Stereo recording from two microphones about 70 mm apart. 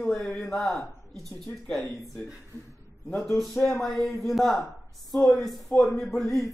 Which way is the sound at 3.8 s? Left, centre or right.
Centre.